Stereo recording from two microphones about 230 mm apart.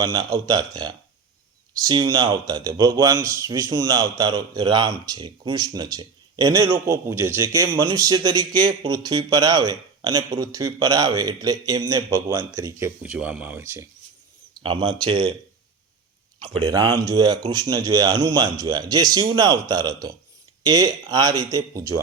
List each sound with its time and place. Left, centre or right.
0.0 s a man's voice: centre
14.6 s speech: right
16.4 s a man's voice: centre